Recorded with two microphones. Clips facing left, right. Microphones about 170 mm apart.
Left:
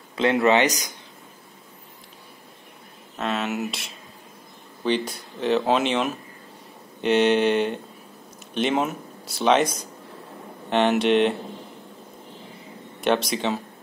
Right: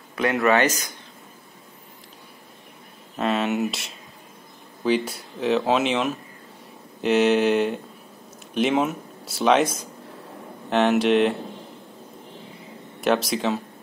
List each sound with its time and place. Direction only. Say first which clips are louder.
0.1 s speech: left 1 dB; 25° left (ahead or behind)
3.2 s speech: right 4 dB; centre (ahead or behind)
10.7 s speech: right 1 dB; centre (ahead or behind)
13.0 s speech: right 1 dB; centre (ahead or behind)